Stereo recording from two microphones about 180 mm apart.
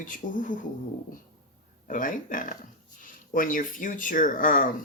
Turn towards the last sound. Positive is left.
turn(degrees=45)  # may be behind; listen again after turning